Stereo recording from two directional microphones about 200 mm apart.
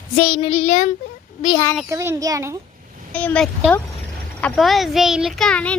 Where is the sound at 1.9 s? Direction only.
15° right (ahead or behind).